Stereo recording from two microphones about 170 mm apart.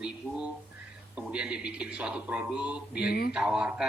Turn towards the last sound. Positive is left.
turn(degrees=-5)  # may be behind; listen again after turning